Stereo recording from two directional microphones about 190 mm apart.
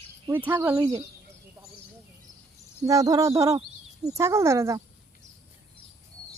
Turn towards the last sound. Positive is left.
turn(degrees=-15)  # may be behind; listen again after turning